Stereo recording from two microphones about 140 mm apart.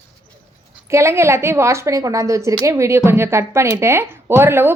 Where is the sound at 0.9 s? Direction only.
20° right (ahead or behind).